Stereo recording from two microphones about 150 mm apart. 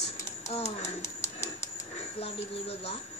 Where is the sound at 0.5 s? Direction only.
45° left (ahead or behind).